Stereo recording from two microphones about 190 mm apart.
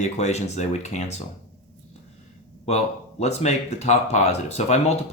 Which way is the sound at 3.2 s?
35° left (ahead or behind).